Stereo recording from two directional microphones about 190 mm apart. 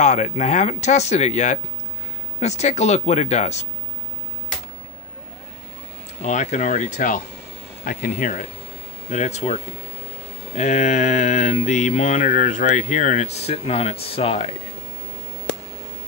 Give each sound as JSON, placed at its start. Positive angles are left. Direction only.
{"t": 0.0, "sound": "mantra", "side_deg": 40}
{"t": 6.2, "sound": "mantra", "side_deg": 40}
{"t": 7.8, "sound": "speech", "side_deg": 50}
{"t": 9.1, "sound": "mantra", "side_deg": 35}